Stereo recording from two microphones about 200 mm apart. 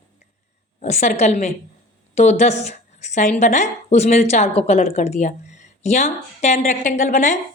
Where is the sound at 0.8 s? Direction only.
35° left (ahead or behind).